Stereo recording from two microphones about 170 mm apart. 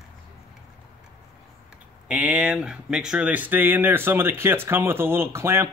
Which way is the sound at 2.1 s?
10° right (ahead or behind).